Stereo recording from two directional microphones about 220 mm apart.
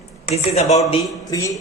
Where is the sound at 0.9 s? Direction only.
15° left (ahead or behind).